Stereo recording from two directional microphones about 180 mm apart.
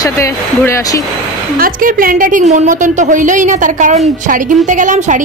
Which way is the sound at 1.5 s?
55° right (ahead or behind).